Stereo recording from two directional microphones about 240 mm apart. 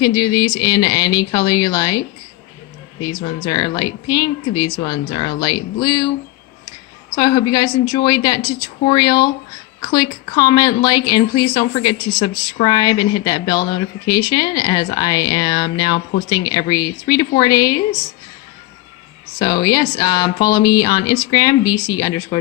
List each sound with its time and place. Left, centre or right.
0.0 s speech: centre
3.0 s speech: centre
7.2 s speech: centre
19.4 s speech: centre